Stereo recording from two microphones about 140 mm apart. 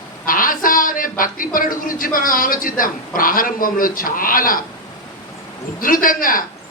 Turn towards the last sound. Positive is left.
turn(degrees=80)